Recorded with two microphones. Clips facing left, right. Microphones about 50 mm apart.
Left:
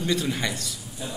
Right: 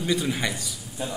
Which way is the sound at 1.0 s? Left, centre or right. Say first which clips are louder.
Right 4 dB; right.